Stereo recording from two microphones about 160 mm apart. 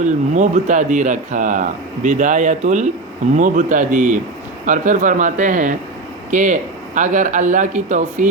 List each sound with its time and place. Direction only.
0.0 s speech: 50° right (ahead or behind)